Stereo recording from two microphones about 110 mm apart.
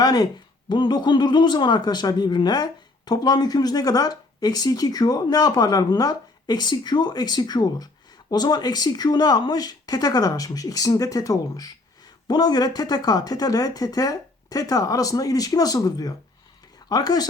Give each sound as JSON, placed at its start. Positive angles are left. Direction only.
{"t": 0.0, "sound": "speech", "side_deg": 35}